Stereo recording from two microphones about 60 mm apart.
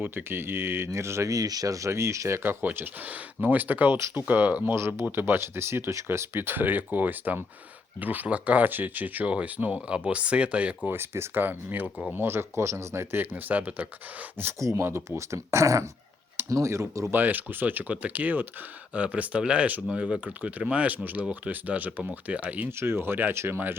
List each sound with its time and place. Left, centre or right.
0.0 s speech: right
1.3 s speech: right
2.4 s speech: right
4.6 s speech: right; by 10.8 s centre
10.8 s speech: right
11.4 s speech: right
13.3 s speech: right
14.6 s speech: right
14.8 s speech: right
17.1 s speech: right
22.7 s speech: right